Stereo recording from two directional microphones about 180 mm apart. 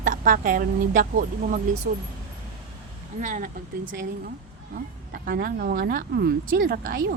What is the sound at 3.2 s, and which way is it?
Speech, 45° right (ahead or behind).